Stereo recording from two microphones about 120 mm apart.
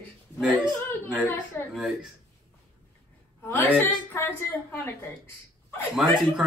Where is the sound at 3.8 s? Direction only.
15° left (ahead or behind).